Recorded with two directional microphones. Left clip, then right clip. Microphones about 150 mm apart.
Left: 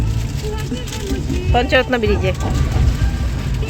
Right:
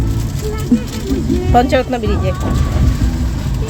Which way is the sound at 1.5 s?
15° right (ahead or behind).